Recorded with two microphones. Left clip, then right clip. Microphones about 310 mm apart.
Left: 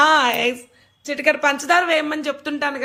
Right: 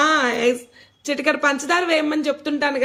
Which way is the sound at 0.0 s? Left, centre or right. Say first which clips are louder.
Left 2 dB; centre.